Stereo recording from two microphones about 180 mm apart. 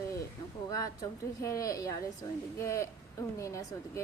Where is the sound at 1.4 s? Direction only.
20° left (ahead or behind).